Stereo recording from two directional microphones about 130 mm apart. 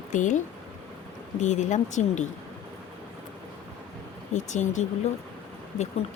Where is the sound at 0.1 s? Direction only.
70° left (ahead or behind).